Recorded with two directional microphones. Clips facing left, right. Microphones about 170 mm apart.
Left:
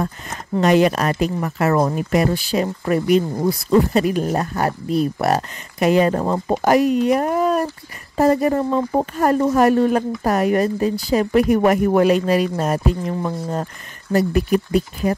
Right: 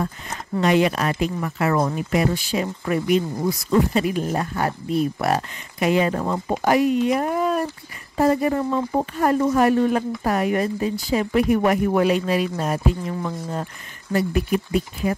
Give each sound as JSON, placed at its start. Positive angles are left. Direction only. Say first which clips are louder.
{"t": 0.6, "sound": "speech", "louder": "left 3 dB", "side_deg": 45}